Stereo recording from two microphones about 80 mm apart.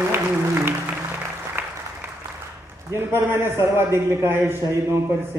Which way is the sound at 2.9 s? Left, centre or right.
Right.